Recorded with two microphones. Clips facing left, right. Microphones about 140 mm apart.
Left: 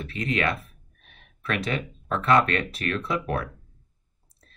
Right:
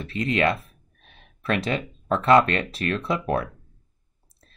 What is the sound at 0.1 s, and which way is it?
Speech, 30° right (ahead or behind).